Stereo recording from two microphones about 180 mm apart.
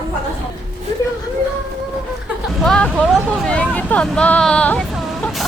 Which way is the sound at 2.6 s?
5° left (ahead or behind).